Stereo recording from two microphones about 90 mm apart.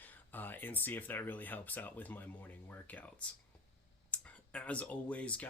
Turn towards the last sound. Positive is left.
turn(degrees=15)  # may be behind; listen again after turning